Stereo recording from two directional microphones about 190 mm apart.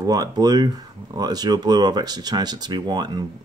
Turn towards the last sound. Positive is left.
turn(degrees=-20)  # may be behind; listen again after turning